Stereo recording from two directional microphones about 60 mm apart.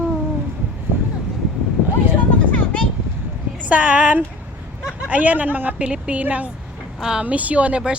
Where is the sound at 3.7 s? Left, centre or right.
Right.